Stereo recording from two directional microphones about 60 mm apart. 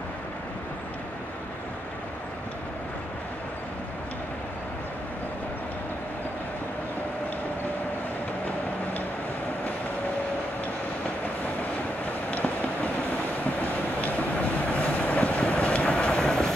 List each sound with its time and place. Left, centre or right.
12.3 s vehicle: left
13.4 s train: left; by 16.5 s centre